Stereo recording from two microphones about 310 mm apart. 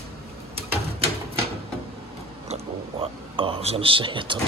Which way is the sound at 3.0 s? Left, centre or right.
Centre.